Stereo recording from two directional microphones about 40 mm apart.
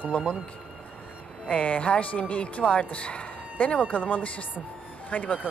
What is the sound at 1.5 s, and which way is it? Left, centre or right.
Speech, left.